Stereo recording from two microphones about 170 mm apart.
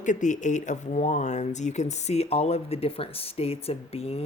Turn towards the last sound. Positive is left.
turn(degrees=35)  # may be behind; listen again after turning